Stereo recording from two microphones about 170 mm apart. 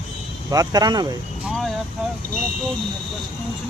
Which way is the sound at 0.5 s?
20° right (ahead or behind).